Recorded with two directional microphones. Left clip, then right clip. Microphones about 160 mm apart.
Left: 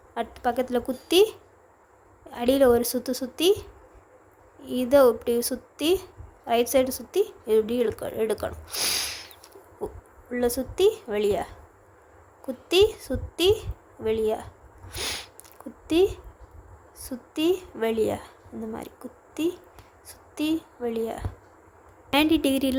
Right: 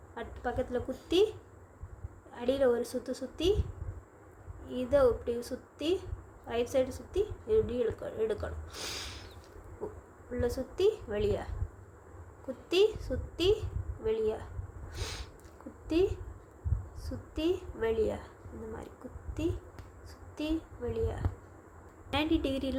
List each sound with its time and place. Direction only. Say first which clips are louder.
0.1 s a woman's voice: left 10 dB; 55° left (ahead or behind)
10.3 s a woman's voice: left 8 dB; 50° left (ahead or behind)
12.6 s a woman's voice: left 7 dB; 45° left (ahead or behind)
14.8 s a sound: left 11 dB; 50° left (ahead or behind)
15.9 s a woman's voice: left 7 dB; 45° left (ahead or behind)
19.3 s a woman's voice: left 7 dB; 45° left (ahead or behind)